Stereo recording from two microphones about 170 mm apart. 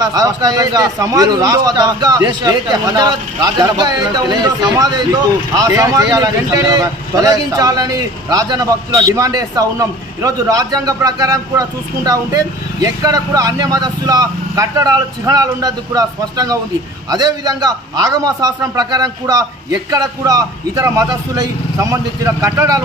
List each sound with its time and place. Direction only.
0.0 s a man's voice: 20° right (ahead or behind)